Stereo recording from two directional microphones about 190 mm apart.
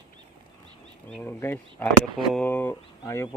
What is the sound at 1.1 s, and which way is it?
Speech, 10° left (ahead or behind).